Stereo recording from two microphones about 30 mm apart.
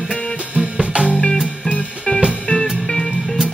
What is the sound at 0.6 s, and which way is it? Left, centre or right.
Music, left.